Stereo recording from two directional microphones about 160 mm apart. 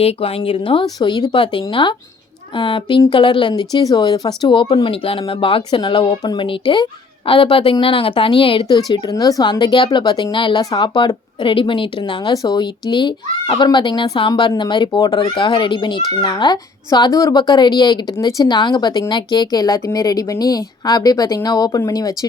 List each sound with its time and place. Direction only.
0.0 s speech: 35° left (ahead or behind)
8.6 s speech: 25° left (ahead or behind)